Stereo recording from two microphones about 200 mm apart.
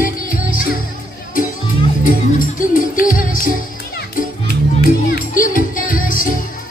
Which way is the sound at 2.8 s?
45° left (ahead or behind).